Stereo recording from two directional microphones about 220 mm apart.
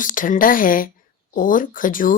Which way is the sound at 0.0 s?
35° left (ahead or behind).